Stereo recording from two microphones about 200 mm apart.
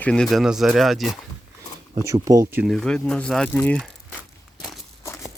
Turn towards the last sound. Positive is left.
turn(degrees=0)  # may be behind; listen again after turning